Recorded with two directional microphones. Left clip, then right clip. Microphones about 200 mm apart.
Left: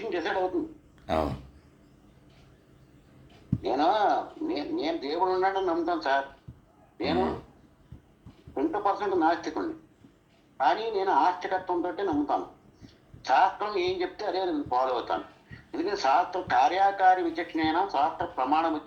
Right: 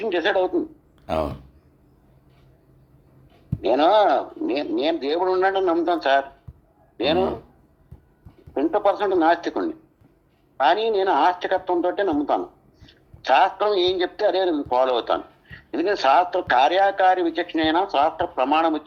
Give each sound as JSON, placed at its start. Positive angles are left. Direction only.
{"t": 0.0, "sound": "a man's voice", "side_deg": -50}
{"t": 1.0, "sound": "speech", "side_deg": -25}
{"t": 3.6, "sound": "a man's voice", "side_deg": -50}
{"t": 8.5, "sound": "a man's voice", "side_deg": -50}